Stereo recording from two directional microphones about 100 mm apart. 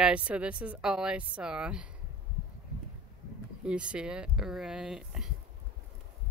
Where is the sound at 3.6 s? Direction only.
10° right (ahead or behind).